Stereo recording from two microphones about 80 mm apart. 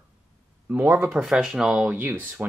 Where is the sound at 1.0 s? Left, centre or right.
Centre.